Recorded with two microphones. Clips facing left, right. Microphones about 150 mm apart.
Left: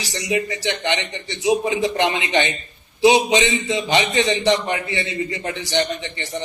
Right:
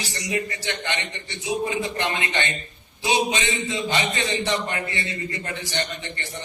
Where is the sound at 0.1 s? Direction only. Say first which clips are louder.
Left 7 dB; 90° left.